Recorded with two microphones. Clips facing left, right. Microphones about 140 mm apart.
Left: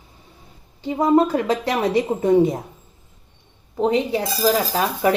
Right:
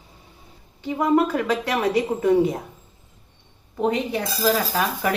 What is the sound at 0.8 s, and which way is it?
A woman's voice, 30° left (ahead or behind).